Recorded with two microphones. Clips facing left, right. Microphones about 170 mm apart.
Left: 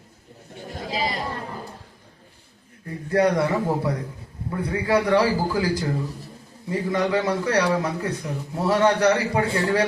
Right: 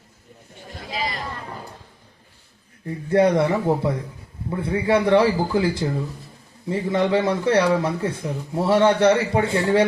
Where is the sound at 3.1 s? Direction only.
25° right (ahead or behind).